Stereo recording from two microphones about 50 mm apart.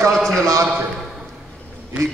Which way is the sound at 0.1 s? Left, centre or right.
Centre.